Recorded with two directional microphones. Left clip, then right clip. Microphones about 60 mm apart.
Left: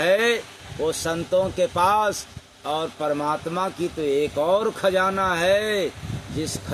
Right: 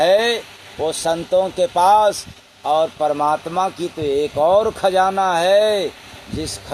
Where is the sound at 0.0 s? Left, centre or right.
Left.